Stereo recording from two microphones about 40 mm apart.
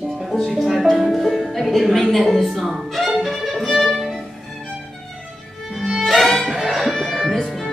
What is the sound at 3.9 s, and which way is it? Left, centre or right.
Music, centre.